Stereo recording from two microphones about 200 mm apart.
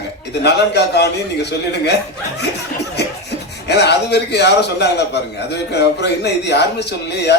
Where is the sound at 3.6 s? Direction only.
55° left (ahead or behind).